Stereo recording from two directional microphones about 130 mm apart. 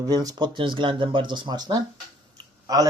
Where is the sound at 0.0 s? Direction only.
30° right (ahead or behind).